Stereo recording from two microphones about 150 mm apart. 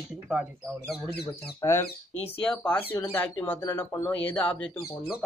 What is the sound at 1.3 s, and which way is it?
Speech, 15° left (ahead or behind).